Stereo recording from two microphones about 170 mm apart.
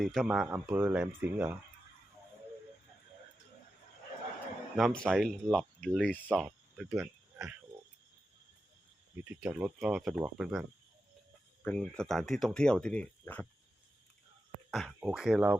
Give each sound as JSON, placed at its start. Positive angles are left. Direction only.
{"t": 0.0, "sound": "speech", "side_deg": 0}
{"t": 4.8, "sound": "speech", "side_deg": 5}
{"t": 6.9, "sound": "cricket", "side_deg": -15}
{"t": 9.3, "sound": "speech", "side_deg": -10}
{"t": 14.7, "sound": "speech", "side_deg": 0}